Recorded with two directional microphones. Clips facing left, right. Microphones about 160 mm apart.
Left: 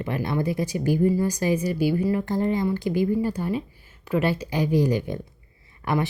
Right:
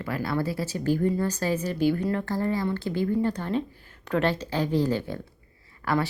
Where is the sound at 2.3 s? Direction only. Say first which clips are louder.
Left 3 dB; 20° left (ahead or behind).